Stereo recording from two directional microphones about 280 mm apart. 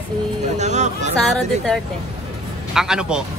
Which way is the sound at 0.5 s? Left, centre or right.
Right.